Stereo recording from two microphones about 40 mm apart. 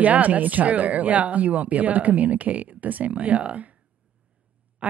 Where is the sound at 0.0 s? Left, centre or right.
Right.